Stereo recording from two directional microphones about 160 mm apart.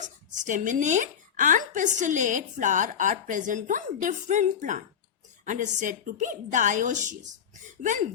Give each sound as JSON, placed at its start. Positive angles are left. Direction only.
{"t": 0.0, "sound": "a woman's voice", "side_deg": -50}